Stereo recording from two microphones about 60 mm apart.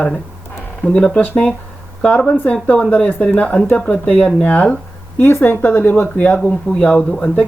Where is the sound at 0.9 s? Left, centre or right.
Centre.